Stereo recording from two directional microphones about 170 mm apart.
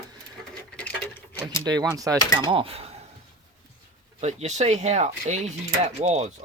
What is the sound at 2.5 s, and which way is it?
Speech, 30° right (ahead or behind).